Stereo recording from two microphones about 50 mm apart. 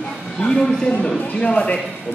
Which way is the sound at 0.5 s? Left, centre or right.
Centre.